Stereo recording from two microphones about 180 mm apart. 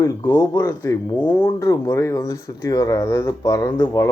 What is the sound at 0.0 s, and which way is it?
Speech, 15° left (ahead or behind).